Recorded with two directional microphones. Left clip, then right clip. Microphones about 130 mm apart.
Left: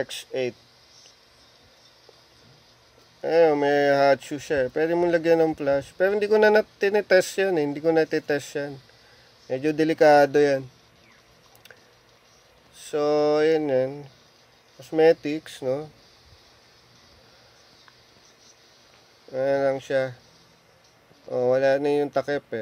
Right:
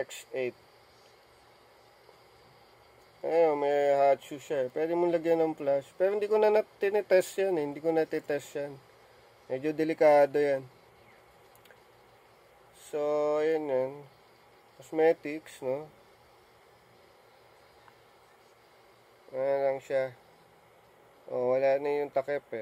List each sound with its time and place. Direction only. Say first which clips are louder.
0.0 s speech: left 6 dB; 30° left (ahead or behind)
3.2 s speech: left 7 dB; 30° left (ahead or behind)
12.9 s speech: left 7 dB; 25° left (ahead or behind)
19.3 s speech: left 6 dB; 25° left (ahead or behind)
21.3 s speech: left 6 dB; 25° left (ahead or behind)